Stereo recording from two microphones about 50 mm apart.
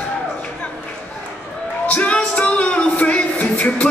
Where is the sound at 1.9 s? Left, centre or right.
Left.